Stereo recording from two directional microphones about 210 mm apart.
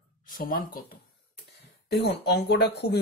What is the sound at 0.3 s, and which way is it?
Speech, 45° left (ahead or behind).